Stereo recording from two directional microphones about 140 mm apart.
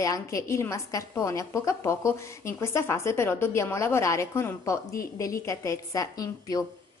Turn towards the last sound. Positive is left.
turn(degrees=25)  # may be behind; listen again after turning